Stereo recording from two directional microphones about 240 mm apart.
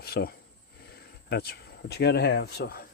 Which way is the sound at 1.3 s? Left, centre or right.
Left.